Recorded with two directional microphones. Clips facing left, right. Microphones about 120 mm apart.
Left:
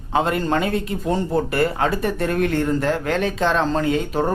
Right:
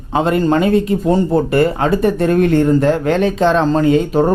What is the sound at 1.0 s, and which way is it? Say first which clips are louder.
Speech: right 7 dB; 30° right (ahead or behind).